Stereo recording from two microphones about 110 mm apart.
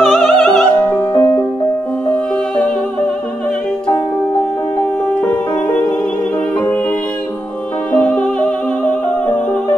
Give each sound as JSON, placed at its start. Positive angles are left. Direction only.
{"t": 0.0, "sound": "music", "side_deg": 5}
{"t": 0.8, "sound": "music", "side_deg": 25}
{"t": 7.9, "sound": "music", "side_deg": 10}